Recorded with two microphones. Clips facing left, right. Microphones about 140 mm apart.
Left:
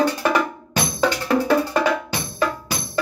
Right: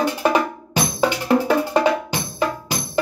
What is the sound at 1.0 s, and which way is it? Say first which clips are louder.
Music: right 1 dB; 15° right (ahead or behind).